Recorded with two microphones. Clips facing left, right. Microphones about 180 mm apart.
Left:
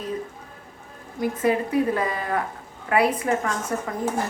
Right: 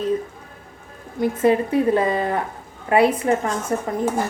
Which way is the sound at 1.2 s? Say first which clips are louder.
Right 5 dB; 25° right (ahead or behind).